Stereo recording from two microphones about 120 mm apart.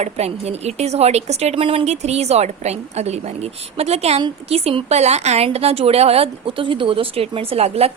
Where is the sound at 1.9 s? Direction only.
65° right (ahead or behind).